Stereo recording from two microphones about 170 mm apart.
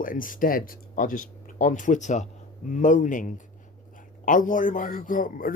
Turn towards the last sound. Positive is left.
turn(degrees=55)  # may be behind; listen again after turning